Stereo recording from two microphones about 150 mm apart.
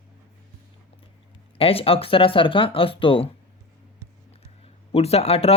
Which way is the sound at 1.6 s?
40° left (ahead or behind).